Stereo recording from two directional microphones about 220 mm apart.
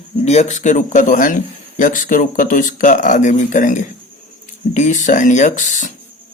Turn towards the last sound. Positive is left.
turn(degrees=35)  # may be behind; listen again after turning